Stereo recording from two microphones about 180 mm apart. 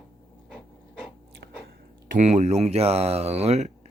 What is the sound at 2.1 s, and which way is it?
Speech, 40° right (ahead or behind).